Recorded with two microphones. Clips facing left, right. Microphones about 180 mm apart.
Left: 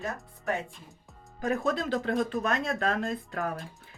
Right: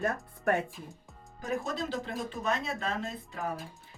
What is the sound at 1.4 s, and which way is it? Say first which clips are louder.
Speech: left 5 dB; 60° left (ahead or behind).